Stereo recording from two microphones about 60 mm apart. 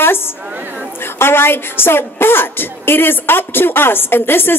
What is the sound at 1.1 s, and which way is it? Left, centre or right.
A woman's voice, left.